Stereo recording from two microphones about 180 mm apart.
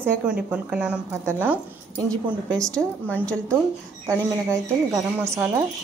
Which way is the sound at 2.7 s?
5° left (ahead or behind).